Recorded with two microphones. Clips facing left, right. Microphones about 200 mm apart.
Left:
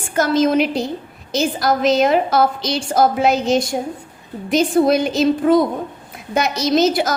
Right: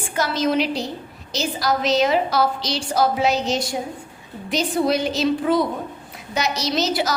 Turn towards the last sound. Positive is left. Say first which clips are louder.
# left 6 dB
turn(degrees=50)  # may be behind; listen again after turning